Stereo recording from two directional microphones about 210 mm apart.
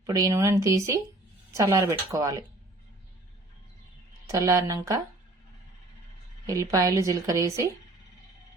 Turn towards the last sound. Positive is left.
turn(degrees=-15)  # may be behind; listen again after turning